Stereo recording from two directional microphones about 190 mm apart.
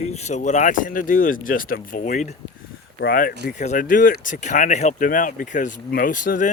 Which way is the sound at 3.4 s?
40° left (ahead or behind).